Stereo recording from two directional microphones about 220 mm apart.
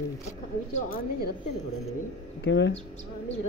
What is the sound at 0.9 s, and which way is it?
Speech, 45° left (ahead or behind).